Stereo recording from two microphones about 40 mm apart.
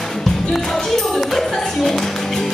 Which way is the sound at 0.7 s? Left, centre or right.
Centre.